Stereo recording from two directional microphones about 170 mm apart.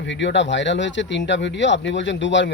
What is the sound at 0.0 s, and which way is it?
Speech, 90° left.